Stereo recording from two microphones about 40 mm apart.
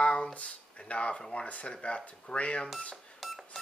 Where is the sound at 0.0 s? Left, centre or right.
Left.